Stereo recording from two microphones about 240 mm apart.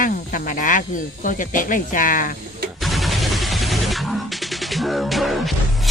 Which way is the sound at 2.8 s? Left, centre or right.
Centre.